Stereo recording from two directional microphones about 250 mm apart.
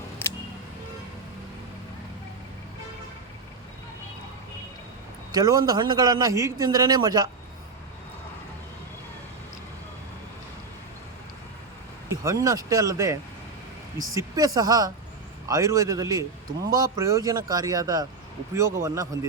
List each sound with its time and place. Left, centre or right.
5.3 s a man's voice: centre
12.2 s a man's voice: centre